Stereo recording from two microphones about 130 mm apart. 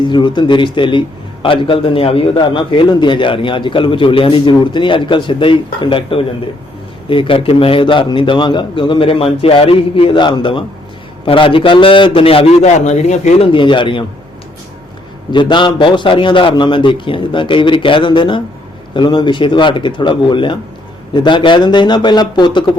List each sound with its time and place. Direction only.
0.0 s a man's voice: 35° left (ahead or behind); by 13.3 s 65° left (ahead or behind)
13.4 s a man's voice: 40° left (ahead or behind)
15.3 s a man's voice: 35° left (ahead or behind)